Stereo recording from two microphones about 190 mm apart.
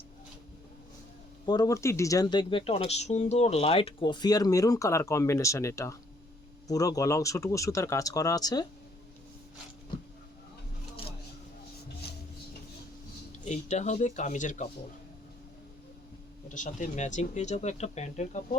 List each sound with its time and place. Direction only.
1.5 s speech: 20° left (ahead or behind)
13.4 s speech: 35° left (ahead or behind)
16.6 s speech: 40° left (ahead or behind)